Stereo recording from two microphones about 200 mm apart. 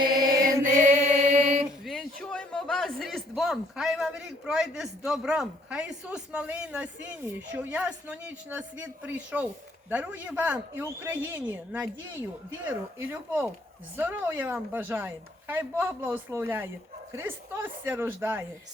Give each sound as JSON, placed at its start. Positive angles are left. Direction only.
{"t": 0.0, "sound": "mantra", "side_deg": -20}
{"t": 0.6, "sound": "music", "side_deg": -35}
{"t": 1.8, "sound": "a man's voice", "side_deg": 0}